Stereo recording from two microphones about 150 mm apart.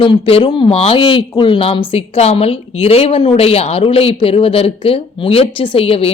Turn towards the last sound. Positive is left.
turn(degrees=40)  # may be behind; listen again after turning